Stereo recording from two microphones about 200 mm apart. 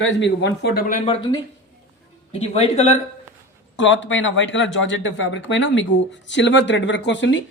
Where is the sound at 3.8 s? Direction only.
65° left (ahead or behind).